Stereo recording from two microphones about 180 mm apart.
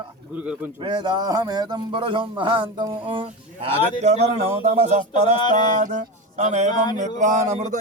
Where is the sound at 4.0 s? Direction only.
40° right (ahead or behind).